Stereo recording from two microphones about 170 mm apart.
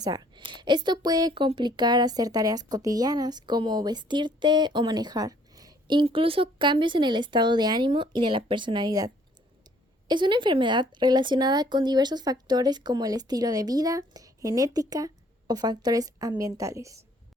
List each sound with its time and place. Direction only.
0.0 s speech: 25° right (ahead or behind)